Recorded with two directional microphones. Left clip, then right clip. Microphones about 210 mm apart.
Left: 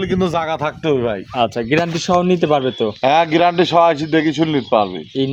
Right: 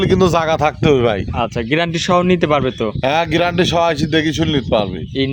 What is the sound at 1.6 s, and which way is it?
Speech, 20° right (ahead or behind).